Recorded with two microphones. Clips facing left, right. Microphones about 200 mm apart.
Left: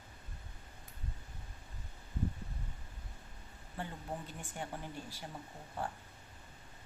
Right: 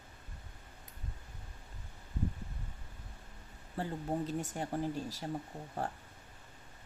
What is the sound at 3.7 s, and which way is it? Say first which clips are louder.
Speech: right 7 dB; 35° right (ahead or behind).